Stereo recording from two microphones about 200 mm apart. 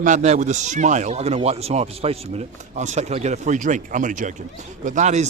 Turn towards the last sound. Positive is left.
turn(degrees=-35)  # may be behind; listen again after turning